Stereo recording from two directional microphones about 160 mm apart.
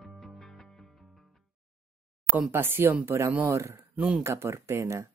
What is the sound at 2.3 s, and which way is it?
Speech, 10° right (ahead or behind).